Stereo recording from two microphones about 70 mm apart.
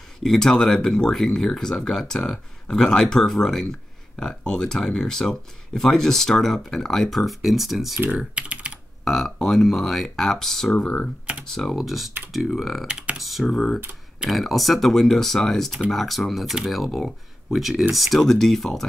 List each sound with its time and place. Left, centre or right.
0.2 s speech: centre
8.4 s typing: centre
9.0 s speech: centre
12.8 s speech: centre
13.2 s speech: centre